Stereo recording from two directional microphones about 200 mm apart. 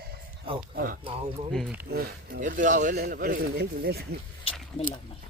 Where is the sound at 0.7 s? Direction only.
45° right (ahead or behind).